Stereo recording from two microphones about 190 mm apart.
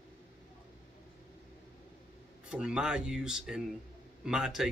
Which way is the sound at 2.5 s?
5° right (ahead or behind).